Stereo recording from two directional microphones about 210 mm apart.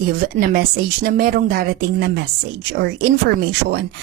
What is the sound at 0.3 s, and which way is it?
A woman's voice, 45° right (ahead or behind).